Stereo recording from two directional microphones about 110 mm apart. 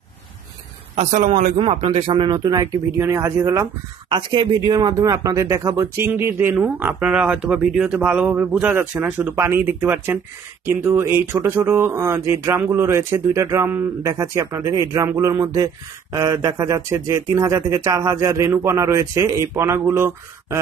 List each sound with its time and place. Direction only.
0.9 s a man's voice: 85° right
1.9 s speech: 50° right (ahead or behind); by 3.6 s 25° right (ahead or behind)
4.1 s speech: 45° right (ahead or behind); by 20.5 s 20° right (ahead or behind)